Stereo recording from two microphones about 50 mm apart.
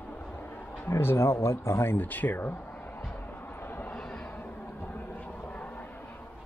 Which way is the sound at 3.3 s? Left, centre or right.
Left.